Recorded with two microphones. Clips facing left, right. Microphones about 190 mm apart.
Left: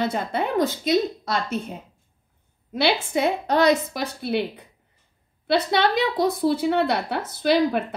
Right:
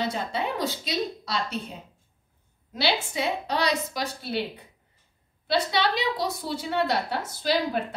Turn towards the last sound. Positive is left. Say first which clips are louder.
# left 5 dB
turn(degrees=60)  # may be behind; listen again after turning